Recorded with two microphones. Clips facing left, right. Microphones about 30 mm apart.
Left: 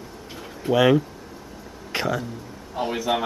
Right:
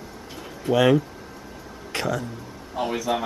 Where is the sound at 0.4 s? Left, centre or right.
Centre.